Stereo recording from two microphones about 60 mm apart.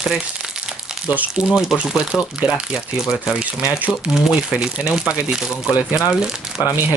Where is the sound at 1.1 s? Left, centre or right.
Right.